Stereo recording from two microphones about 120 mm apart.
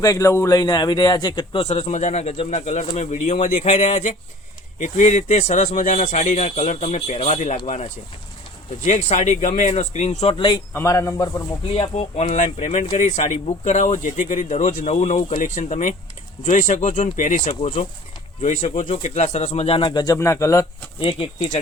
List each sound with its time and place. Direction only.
0.0 s a man's voice: 25° left (ahead or behind)
1.6 s speech: 60° left (ahead or behind); by 3.3 s 90° left
3.3 s speech: 60° left (ahead or behind)
8.8 s speech: 75° left (ahead or behind)
10.3 s speech: 45° left (ahead or behind)
10.8 s speech: 25° left (ahead or behind)
11.7 s speech: 55° left (ahead or behind)
15.4 s speech: 90° left
17.6 s speech: 65° left (ahead or behind)
18.3 s speech: 85° left
18.8 s speech: 65° left (ahead or behind)
19.8 s a man's voice: 35° left (ahead or behind)
20.1 s speech: 25° left (ahead or behind)
21.0 s speech: 50° left (ahead or behind)